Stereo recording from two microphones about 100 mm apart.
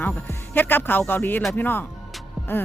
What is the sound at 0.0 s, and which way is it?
A woman's voice, 20° left (ahead or behind).